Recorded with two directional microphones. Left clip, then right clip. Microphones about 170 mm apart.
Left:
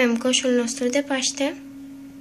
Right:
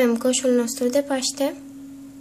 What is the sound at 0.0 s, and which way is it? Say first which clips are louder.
A woman's voice: right 1 dB; 30° right (ahead or behind).